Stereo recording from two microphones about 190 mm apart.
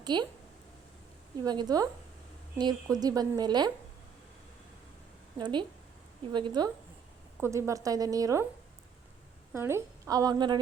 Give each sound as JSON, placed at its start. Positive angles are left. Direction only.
{"t": 0.0, "sound": "speech", "side_deg": -25}
{"t": 1.5, "sound": "a woman's voice", "side_deg": -20}
{"t": 5.4, "sound": "a woman's voice", "side_deg": -25}
{"t": 7.3, "sound": "a woman's voice", "side_deg": -10}
{"t": 9.5, "sound": "a woman's voice", "side_deg": -15}